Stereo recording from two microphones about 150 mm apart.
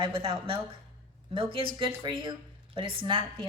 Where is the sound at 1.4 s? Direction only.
35° right (ahead or behind).